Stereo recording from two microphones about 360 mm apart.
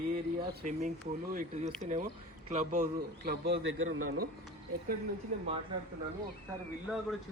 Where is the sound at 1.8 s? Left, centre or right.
Right.